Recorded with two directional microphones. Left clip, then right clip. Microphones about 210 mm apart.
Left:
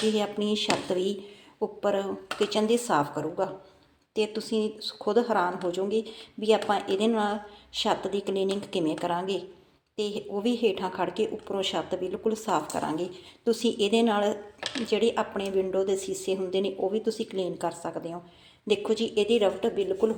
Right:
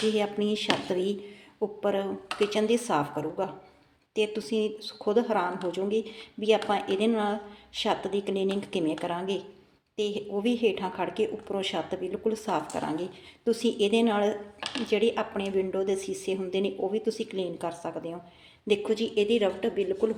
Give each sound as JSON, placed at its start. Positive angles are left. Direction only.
{"t": 0.1, "sound": "speech", "side_deg": 5}